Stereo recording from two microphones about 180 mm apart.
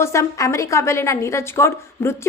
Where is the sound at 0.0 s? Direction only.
15° left (ahead or behind).